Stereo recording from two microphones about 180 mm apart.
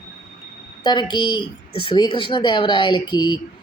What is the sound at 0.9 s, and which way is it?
Speech, 25° left (ahead or behind).